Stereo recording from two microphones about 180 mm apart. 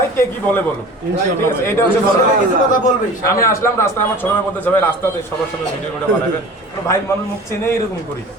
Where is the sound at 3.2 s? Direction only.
15° left (ahead or behind).